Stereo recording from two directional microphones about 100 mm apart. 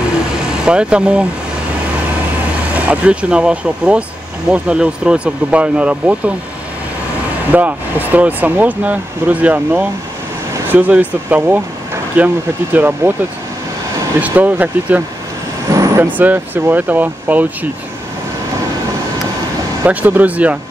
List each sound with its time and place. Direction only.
0.7 s speech: 10° right (ahead or behind)
2.7 s speech: 15° right (ahead or behind)
7.5 s speech: 15° right (ahead or behind)
14.2 s speech: 15° right (ahead or behind)
19.8 s speech: 15° right (ahead or behind)